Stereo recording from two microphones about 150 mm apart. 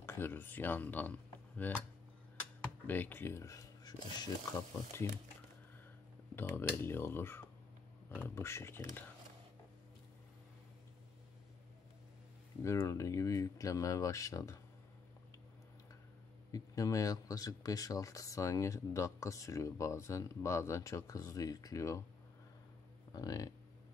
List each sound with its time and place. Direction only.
0.0 s speech: 15° left (ahead or behind)
2.9 s speech: 15° left (ahead or behind)
6.3 s speech: 15° left (ahead or behind)
12.6 s speech: 20° left (ahead or behind)
16.5 s speech: 25° left (ahead or behind)
23.1 s speech: 25° left (ahead or behind)